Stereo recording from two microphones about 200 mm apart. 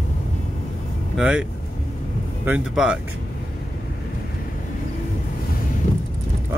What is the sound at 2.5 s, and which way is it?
Speech, 5° right (ahead or behind).